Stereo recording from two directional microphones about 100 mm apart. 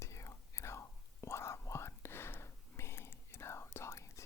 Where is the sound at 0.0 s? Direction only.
30° left (ahead or behind).